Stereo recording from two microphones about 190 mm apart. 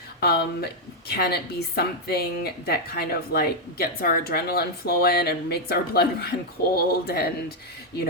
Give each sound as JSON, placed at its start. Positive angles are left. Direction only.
{"t": 0.2, "sound": "speech", "side_deg": 55}